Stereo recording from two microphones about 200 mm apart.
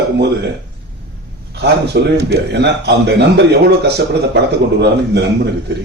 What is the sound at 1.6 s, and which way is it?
Speech, 55° right (ahead or behind).